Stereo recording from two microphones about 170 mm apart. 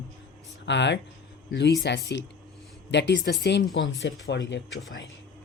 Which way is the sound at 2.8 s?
90° left.